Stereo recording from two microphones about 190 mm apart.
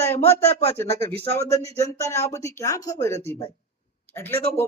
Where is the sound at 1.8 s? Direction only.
15° left (ahead or behind).